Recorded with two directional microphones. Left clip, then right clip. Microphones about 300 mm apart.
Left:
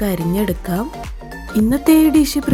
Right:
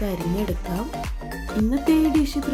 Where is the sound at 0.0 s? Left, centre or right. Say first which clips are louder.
Left 7 dB; left.